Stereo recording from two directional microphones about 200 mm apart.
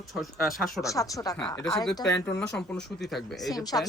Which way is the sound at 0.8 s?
15° left (ahead or behind).